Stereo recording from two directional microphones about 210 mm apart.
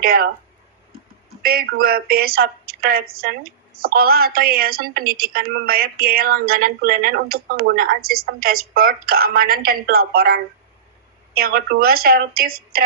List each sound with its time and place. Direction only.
0.0 s speech: 45° right (ahead or behind)
1.4 s a woman's voice: 45° right (ahead or behind)